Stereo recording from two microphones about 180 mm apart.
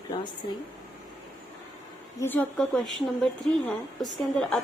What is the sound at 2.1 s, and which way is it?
A woman's voice, 10° left (ahead or behind).